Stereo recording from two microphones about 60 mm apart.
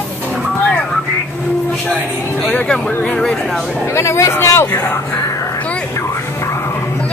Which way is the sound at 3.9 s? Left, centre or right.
Left.